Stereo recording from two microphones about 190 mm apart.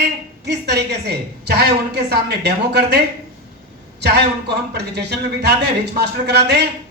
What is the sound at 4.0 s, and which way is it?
A man's voice, 60° right (ahead or behind).